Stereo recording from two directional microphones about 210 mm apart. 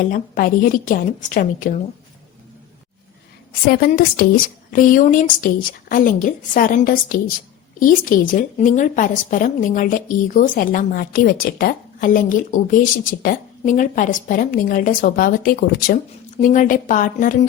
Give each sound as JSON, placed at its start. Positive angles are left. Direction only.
{"t": 0.0, "sound": "a woman's voice", "side_deg": 40}
{"t": 3.7, "sound": "a woman's voice", "side_deg": 40}